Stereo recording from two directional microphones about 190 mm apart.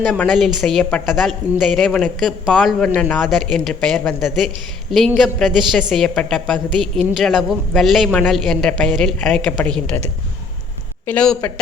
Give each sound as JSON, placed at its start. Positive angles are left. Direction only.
{"t": 0.0, "sound": "a man's voice", "side_deg": 5}
{"t": 11.0, "sound": "a man's voice", "side_deg": 5}